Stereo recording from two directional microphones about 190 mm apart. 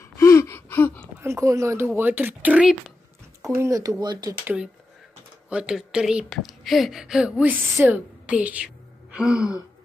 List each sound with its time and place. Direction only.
0.2 s gasp: 15° left (ahead or behind)
1.2 s speech: 15° right (ahead or behind)
5.5 s a woman's voice: 5° right (ahead or behind)